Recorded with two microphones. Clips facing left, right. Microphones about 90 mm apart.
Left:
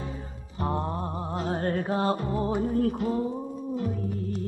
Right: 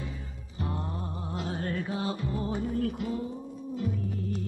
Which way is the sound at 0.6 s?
40° left (ahead or behind).